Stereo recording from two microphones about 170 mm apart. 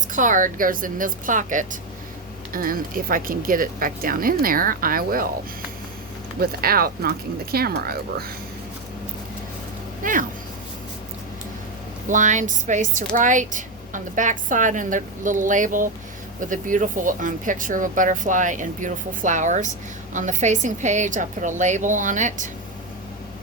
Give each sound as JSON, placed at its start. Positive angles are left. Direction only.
{"t": 0.1, "sound": "speech", "side_deg": -50}
{"t": 6.4, "sound": "speech", "side_deg": -60}
{"t": 10.0, "sound": "speech", "side_deg": -50}
{"t": 12.0, "sound": "speech", "side_deg": -50}